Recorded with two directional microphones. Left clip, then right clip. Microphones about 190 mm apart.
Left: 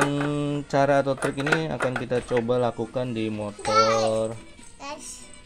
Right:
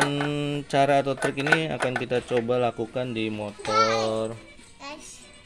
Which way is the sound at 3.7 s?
25° right (ahead or behind).